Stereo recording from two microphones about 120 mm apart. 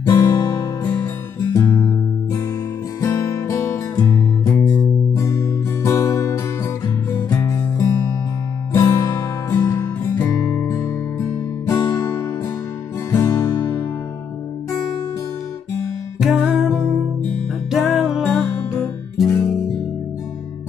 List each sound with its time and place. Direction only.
0.0 s guitar: 25° left (ahead or behind)
3.0 s music: 20° left (ahead or behind)
5.2 s guitar: 25° left (ahead or behind)
8.7 s music: 30° left (ahead or behind)
16.2 s music: 5° right (ahead or behind)